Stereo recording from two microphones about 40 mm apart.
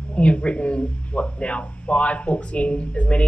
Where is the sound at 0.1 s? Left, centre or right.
Left.